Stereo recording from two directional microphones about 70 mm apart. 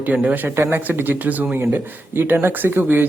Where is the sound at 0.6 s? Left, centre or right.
Right.